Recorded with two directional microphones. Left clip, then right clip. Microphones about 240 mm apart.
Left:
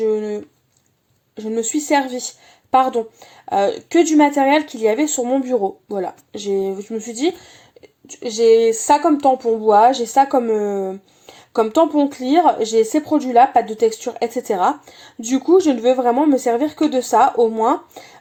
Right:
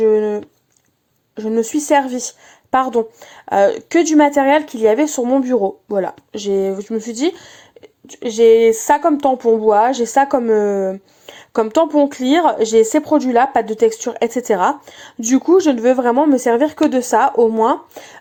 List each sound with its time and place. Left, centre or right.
0.0 s a sound: centre
1.4 s a woman's voice: centre
3.5 s a woman's voice: centre